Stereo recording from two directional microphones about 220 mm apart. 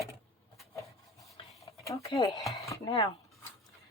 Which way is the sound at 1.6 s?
15° left (ahead or behind).